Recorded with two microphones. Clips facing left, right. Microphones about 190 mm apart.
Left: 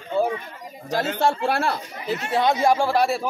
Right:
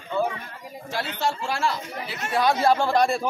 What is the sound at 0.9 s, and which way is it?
Speech, 45° left (ahead or behind).